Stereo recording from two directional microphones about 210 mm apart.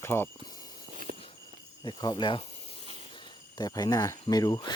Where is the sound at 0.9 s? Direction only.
40° right (ahead or behind).